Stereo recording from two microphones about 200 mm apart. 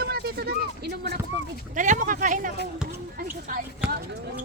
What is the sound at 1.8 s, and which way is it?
Speech, 40° right (ahead or behind).